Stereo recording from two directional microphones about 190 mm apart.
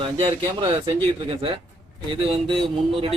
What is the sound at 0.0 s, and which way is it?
Speech, 25° right (ahead or behind).